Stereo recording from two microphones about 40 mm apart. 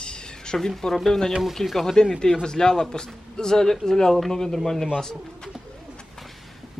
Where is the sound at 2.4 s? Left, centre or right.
Centre.